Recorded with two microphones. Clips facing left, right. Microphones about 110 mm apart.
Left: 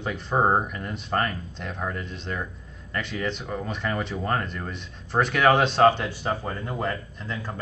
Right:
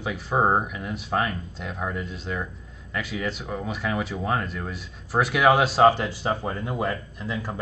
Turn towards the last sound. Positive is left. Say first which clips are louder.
# right 3 dB
turn(degrees=-5)  # may be behind; listen again after turning